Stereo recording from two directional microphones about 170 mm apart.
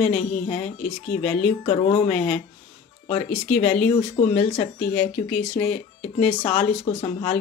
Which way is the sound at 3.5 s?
40° left (ahead or behind).